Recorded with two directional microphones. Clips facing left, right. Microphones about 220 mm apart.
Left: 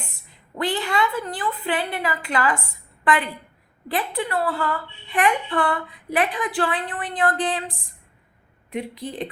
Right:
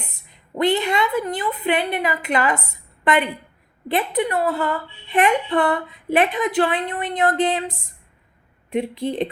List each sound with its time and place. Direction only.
0.3 s a woman's voice: 20° right (ahead or behind)